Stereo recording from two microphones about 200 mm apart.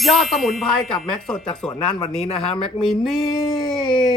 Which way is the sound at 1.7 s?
25° left (ahead or behind).